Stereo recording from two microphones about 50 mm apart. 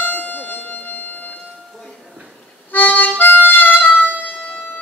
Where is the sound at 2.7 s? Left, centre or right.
Left.